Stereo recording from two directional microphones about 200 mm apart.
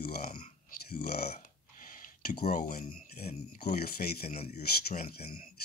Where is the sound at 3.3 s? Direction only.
35° left (ahead or behind).